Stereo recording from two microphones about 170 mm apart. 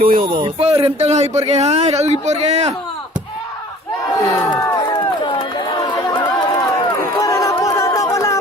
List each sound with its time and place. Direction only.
0.0 s speech: 55° right (ahead or behind)
0.4 s speech: 35° right (ahead or behind)
4.9 s chatter: 30° left (ahead or behind)
7.2 s music: 20° left (ahead or behind)